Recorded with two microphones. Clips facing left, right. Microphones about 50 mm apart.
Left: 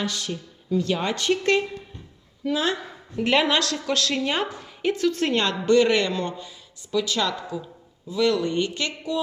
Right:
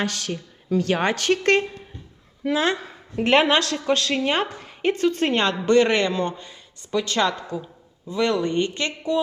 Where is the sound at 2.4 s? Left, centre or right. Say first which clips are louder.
Right 2 dB; right.